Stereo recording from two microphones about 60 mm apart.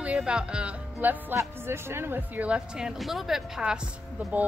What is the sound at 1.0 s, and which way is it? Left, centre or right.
Speech, right.